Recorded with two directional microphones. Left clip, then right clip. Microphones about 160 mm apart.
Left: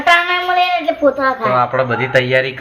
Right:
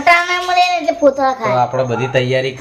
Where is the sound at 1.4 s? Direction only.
5° right (ahead or behind).